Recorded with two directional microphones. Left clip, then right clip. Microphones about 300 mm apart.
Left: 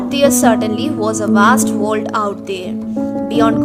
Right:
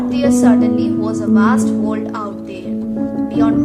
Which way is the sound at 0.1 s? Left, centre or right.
Left.